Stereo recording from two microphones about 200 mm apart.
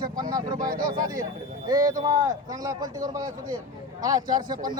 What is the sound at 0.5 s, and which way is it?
Speech, 45° right (ahead or behind).